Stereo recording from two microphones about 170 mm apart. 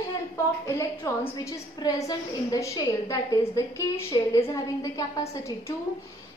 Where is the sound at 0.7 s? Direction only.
20° left (ahead or behind).